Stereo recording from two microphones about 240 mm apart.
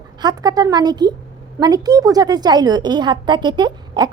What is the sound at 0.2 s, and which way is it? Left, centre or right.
A woman's voice, centre.